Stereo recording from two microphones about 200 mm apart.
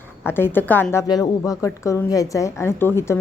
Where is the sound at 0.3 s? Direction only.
10° left (ahead or behind).